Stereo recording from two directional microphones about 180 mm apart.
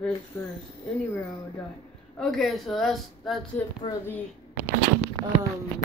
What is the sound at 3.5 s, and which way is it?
Speech, 10° left (ahead or behind).